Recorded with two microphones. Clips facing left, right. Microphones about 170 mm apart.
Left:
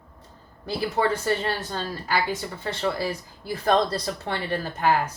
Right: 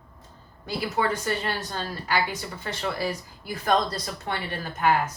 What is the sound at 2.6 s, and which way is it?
Speech, 30° left (ahead or behind).